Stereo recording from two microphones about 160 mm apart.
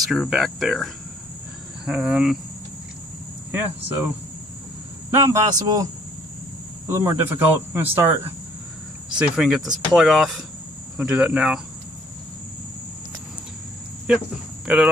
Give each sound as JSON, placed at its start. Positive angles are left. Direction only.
{"t": 0.1, "sound": "speech", "side_deg": 0}
{"t": 1.9, "sound": "speech", "side_deg": -5}
{"t": 3.5, "sound": "speech", "side_deg": -15}
{"t": 5.1, "sound": "speech", "side_deg": -20}
{"t": 6.9, "sound": "speech", "side_deg": -15}
{"t": 9.2, "sound": "speech", "side_deg": -5}
{"t": 14.1, "sound": "speech", "side_deg": -5}